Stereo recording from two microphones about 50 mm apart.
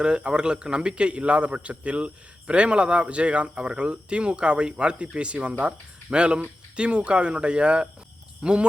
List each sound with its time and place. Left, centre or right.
0.0 s a man's voice: centre